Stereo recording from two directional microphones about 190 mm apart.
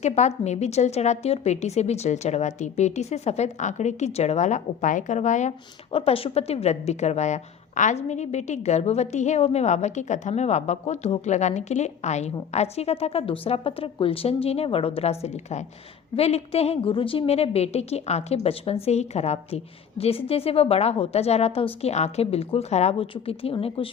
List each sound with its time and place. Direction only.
0.0 s a woman's voice: 35° left (ahead or behind)